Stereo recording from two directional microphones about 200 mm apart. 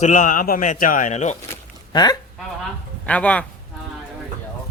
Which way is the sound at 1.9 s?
20° left (ahead or behind).